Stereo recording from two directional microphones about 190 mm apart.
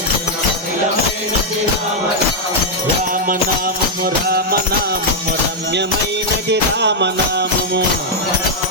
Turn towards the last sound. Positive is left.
turn(degrees=-65)  # may be behind; listen again after turning